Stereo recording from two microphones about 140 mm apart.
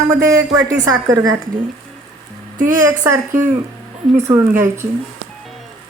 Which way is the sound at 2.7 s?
20° right (ahead or behind).